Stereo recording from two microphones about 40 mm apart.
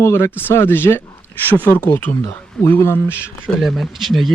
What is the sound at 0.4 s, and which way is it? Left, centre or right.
Speech, left.